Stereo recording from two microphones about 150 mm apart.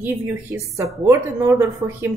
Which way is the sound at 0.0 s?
15° right (ahead or behind).